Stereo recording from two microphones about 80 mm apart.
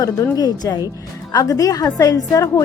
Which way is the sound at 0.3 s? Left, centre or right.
Left.